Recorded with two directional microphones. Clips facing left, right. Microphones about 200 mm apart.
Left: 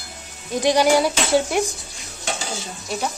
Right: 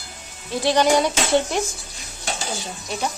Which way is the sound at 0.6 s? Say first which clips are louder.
Left 1 dB; 10° left (ahead or behind).